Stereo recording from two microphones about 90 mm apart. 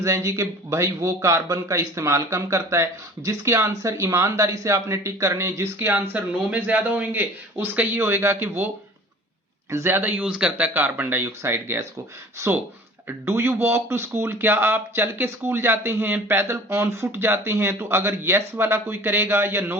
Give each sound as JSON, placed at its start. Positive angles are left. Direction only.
{"t": 0.0, "sound": "a man's voice", "side_deg": -35}
{"t": 10.0, "sound": "a man's voice", "side_deg": -15}